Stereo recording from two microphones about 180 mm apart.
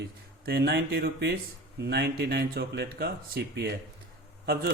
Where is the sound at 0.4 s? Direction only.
60° right (ahead or behind).